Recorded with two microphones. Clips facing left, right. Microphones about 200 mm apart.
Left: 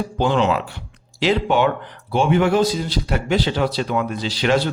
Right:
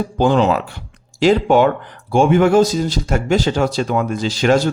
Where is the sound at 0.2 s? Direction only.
40° right (ahead or behind).